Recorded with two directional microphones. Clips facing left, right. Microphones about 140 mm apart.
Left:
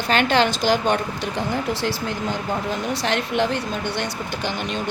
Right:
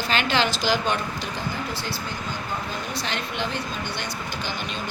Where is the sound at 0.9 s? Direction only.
70° left (ahead or behind).